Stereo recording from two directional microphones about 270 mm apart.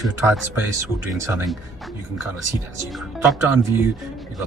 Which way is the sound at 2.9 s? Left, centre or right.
Centre.